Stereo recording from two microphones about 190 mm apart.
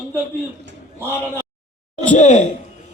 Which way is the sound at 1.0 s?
10° left (ahead or behind).